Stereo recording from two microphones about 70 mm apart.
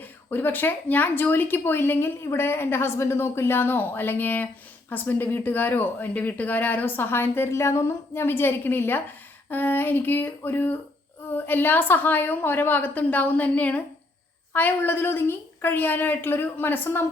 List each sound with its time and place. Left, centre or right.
0.0 s speech: left